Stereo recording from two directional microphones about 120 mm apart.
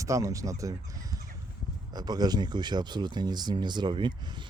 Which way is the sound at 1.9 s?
35° right (ahead or behind).